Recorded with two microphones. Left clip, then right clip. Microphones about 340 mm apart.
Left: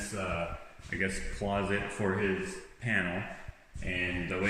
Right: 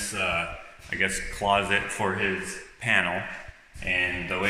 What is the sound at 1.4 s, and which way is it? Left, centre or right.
Speech, right.